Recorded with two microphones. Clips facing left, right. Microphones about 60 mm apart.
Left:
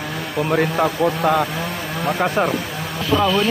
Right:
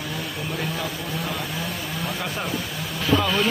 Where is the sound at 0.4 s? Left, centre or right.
Left.